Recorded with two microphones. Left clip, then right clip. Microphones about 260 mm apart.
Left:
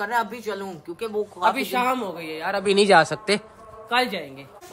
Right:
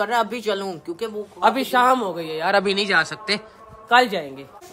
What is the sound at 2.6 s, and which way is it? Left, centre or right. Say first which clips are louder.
Speech: left 3 dB; centre.